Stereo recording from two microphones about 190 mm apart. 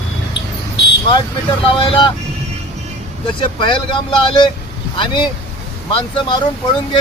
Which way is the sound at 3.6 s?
25° left (ahead or behind).